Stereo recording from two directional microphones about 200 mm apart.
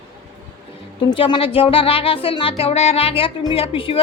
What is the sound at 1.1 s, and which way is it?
Speech, 25° left (ahead or behind).